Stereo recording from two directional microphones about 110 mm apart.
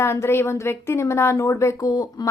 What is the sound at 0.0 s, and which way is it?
A woman's voice, 25° left (ahead or behind).